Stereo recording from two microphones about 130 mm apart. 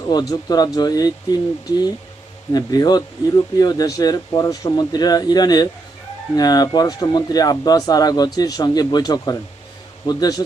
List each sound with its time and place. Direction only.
0.0 s speech: 30° left (ahead or behind)
2.5 s speech: 30° left (ahead or behind)